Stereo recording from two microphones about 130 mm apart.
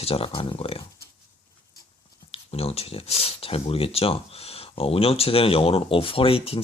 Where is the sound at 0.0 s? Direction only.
45° left (ahead or behind).